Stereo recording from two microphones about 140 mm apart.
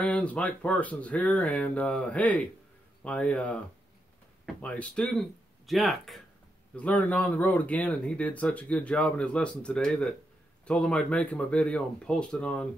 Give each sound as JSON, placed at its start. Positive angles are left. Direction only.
{"t": 0.0, "sound": "speech", "side_deg": 10}